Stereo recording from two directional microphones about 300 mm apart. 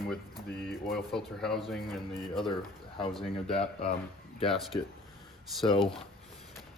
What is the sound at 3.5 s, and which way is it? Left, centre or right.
Speech, centre.